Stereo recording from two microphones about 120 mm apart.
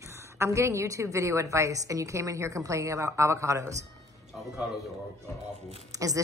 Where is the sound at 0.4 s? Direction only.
25° right (ahead or behind).